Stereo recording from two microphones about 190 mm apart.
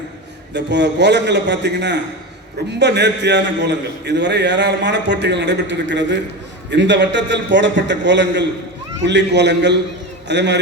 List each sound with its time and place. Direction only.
0.5 s a man's voice: 65° right (ahead or behind)